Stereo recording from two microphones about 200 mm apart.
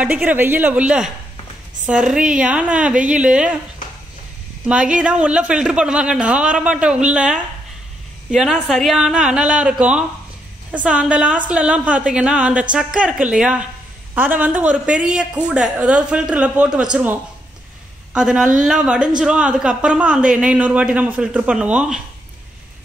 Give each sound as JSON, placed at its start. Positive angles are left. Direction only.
{"t": 0.0, "sound": "a woman's voice", "side_deg": -10}
{"t": 4.6, "sound": "a woman's voice", "side_deg": -5}